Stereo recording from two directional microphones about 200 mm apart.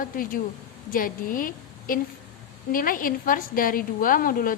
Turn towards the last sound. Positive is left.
turn(degrees=45)  # may be behind; listen again after turning